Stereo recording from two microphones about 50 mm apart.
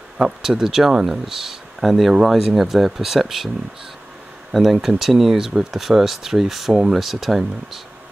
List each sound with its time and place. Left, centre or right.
0.2 s speech: centre
4.5 s speech: centre